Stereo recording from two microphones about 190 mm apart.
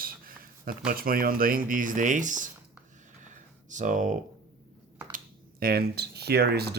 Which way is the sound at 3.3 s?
40° right (ahead or behind).